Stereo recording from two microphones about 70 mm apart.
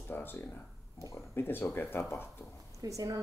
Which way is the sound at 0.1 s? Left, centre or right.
Left.